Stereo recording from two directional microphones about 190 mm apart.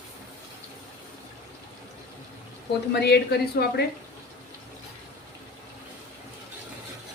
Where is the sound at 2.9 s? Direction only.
60° left (ahead or behind).